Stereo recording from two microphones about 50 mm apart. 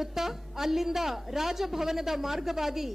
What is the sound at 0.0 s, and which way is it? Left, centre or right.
A woman's voice, centre.